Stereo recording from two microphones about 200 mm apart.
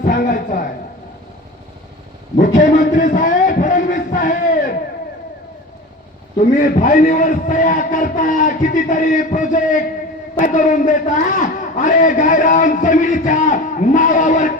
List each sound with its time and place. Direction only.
0.0 s a sound: 45° left (ahead or behind)
2.6 s music: 40° left (ahead or behind)
6.8 s a man's voice: 40° left (ahead or behind)